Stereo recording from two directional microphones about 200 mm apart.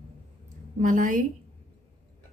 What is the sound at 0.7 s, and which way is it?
Speech, 40° right (ahead or behind).